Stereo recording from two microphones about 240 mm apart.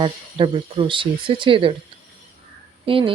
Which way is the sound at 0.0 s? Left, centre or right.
Right.